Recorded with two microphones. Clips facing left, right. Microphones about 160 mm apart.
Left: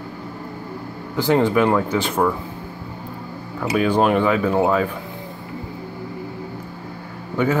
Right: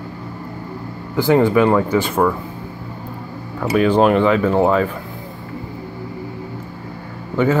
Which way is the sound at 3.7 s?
5° left (ahead or behind).